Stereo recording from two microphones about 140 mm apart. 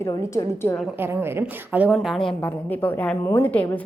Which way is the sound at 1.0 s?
15° right (ahead or behind).